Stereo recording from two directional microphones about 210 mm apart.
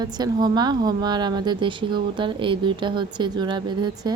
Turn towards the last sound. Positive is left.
turn(degrees=-20)  # may be behind; listen again after turning